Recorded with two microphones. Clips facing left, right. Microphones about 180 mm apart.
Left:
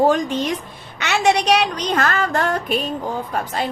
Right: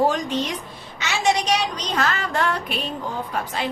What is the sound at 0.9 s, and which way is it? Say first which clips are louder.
A woman's voice: left 4 dB; 65° left (ahead or behind).